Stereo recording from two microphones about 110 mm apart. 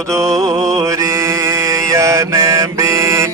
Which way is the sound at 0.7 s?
30° right (ahead or behind).